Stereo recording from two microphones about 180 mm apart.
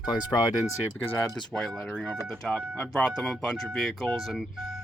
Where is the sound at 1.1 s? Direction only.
10° left (ahead or behind).